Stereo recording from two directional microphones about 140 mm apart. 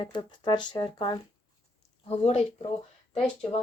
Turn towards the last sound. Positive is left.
turn(degrees=45)  # may be behind; listen again after turning